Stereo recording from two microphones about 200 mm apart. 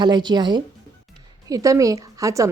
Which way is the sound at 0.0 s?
20° right (ahead or behind).